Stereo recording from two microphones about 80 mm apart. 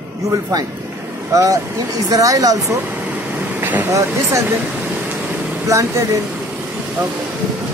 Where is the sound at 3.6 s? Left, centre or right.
Right.